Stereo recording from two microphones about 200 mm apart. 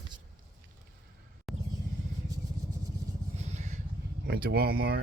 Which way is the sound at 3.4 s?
35° right (ahead or behind).